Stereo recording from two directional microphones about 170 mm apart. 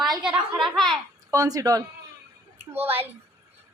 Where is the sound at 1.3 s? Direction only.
20° right (ahead or behind).